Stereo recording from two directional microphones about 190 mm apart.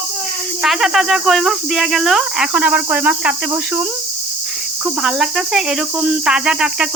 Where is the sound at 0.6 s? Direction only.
Centre (ahead or behind).